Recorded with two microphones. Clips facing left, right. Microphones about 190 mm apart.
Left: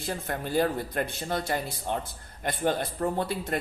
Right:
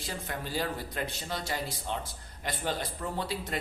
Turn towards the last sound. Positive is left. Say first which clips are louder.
# left 5 dB
turn(degrees=55)  # may be behind; listen again after turning